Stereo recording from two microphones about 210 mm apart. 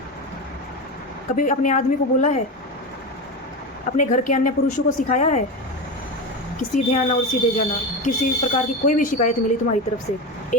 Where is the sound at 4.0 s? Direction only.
35° left (ahead or behind).